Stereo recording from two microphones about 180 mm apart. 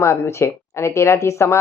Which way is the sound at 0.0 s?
15° left (ahead or behind).